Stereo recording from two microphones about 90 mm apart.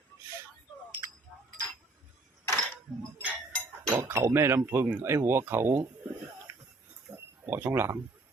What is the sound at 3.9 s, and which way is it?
Speech, 25° right (ahead or behind).